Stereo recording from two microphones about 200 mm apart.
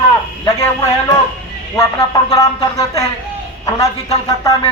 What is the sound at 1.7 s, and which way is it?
A man's voice, 15° left (ahead or behind).